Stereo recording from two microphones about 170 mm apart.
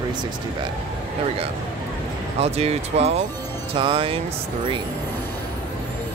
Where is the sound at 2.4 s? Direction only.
35° right (ahead or behind).